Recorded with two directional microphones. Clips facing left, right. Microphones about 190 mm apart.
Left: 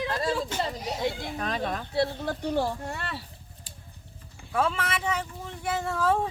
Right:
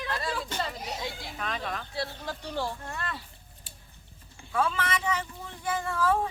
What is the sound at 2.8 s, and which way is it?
Speech, 10° left (ahead or behind).